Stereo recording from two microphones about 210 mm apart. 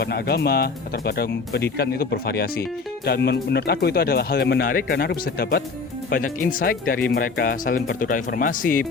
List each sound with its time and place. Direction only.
0.0 s speech: 50° left (ahead or behind)